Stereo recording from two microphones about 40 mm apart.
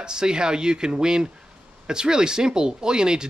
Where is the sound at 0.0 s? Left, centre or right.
Centre.